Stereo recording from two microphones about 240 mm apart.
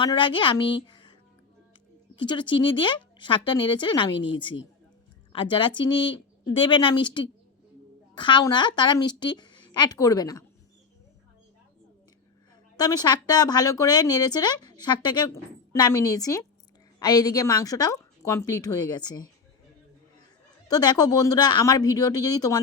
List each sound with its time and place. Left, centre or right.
0.0 s speech: centre
0.9 s a sound: centre
2.1 s speech: centre
12.7 s speech: centre
20.7 s speech: centre